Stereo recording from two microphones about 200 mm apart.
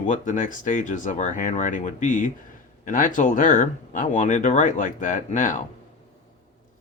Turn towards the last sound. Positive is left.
turn(degrees=40)  # may be behind; listen again after turning